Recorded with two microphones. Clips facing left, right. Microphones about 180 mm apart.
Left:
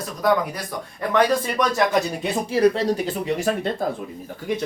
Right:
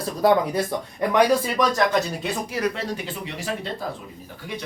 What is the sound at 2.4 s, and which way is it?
Speech, 30° left (ahead or behind).